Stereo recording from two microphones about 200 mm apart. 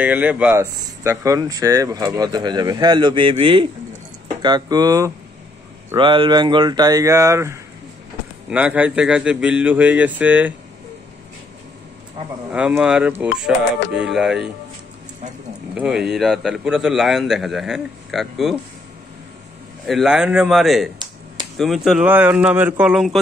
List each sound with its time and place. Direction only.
0.0 s a man's voice: 5° right (ahead or behind)
12.5 s a man's voice: 5° right (ahead or behind)
15.7 s a man's voice: 5° right (ahead or behind)
19.9 s a man's voice: centre (ahead or behind)